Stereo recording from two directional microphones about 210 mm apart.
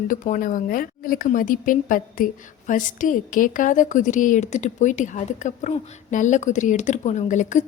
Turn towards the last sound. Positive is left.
turn(degrees=35)  # may be behind; listen again after turning